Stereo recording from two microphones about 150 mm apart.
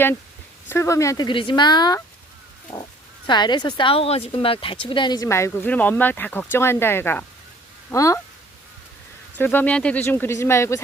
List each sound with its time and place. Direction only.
0.7 s a woman's voice: 20° left (ahead or behind)
2.7 s speech: 15° left (ahead or behind)
3.2 s a woman's voice: 30° left (ahead or behind)
9.4 s speech: 15° left (ahead or behind)